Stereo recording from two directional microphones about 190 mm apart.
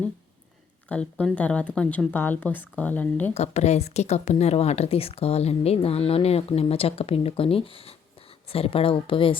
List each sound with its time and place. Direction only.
0.9 s speech: 5° left (ahead or behind)
3.3 s speech: 35° left (ahead or behind)